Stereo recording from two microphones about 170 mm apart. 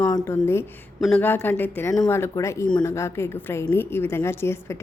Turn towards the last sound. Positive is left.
turn(degrees=15)  # may be behind; listen again after turning